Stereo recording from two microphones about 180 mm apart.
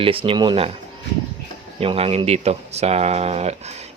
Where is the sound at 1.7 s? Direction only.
35° right (ahead or behind).